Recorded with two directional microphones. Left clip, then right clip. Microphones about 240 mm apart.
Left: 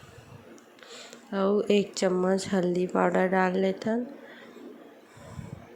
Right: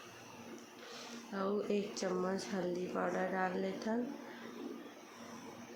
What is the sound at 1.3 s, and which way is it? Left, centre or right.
A woman's voice, left.